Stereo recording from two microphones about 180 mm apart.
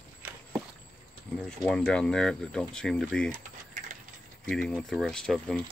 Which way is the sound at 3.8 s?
40° right (ahead or behind).